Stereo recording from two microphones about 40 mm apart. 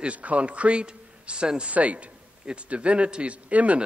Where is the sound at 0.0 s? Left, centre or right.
Right.